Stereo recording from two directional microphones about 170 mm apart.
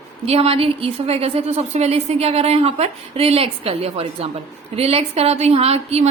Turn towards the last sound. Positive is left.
turn(degrees=-35)  # may be behind; listen again after turning